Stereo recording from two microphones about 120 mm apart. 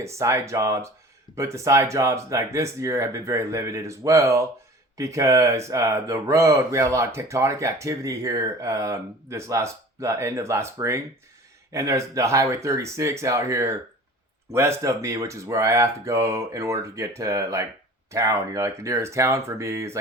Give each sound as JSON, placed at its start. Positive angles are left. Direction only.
{"t": 0.0, "sound": "speech", "side_deg": -25}